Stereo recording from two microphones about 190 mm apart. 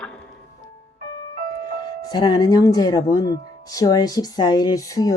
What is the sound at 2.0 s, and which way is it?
Speech, 20° left (ahead or behind).